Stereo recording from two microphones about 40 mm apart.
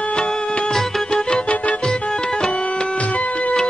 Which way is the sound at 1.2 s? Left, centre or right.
Left.